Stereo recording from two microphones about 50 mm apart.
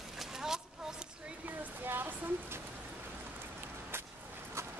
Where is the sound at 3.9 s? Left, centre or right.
Right.